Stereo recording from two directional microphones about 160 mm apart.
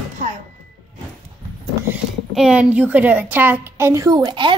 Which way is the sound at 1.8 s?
5° right (ahead or behind).